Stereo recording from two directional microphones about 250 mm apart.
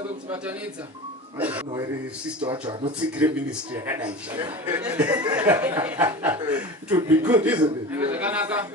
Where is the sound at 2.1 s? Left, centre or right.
Centre.